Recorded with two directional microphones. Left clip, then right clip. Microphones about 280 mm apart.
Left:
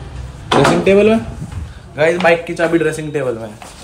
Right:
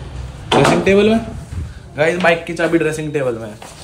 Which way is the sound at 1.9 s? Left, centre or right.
Centre.